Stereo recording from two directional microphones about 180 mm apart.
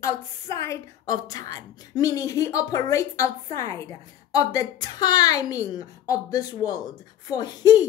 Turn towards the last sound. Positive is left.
turn(degrees=20)  # may be behind; listen again after turning